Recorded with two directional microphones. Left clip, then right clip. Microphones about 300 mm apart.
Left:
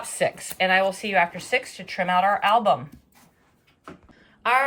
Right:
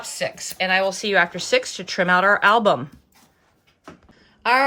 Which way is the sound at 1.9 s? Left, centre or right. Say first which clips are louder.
Right 4 dB; right.